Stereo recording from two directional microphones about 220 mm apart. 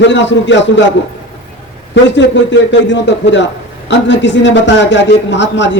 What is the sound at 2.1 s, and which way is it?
A man's voice, 55° left (ahead or behind).